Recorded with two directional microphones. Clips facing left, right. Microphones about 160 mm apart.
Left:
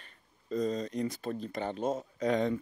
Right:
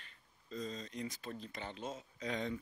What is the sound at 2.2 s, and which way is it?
Speech, 65° left (ahead or behind).